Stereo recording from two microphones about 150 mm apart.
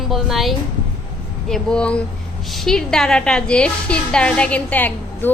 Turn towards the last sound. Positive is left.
turn(degrees=10)  # may be behind; listen again after turning